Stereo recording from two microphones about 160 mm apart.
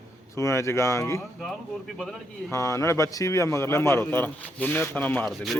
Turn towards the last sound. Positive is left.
turn(degrees=10)  # may be behind; listen again after turning